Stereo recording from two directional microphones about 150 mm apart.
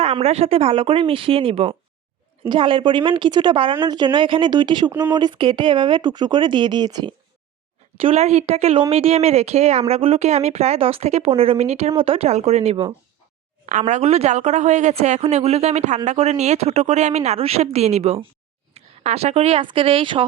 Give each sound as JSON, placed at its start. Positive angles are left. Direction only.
{"t": 0.0, "sound": "speech", "side_deg": -40}
{"t": 7.9, "sound": "speech", "side_deg": -40}
{"t": 13.7, "sound": "speech", "side_deg": -55}